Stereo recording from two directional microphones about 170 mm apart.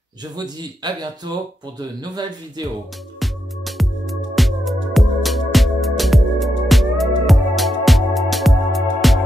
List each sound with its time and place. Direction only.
0.4 s speech: 25° right (ahead or behind)
3.2 s music: centre (ahead or behind)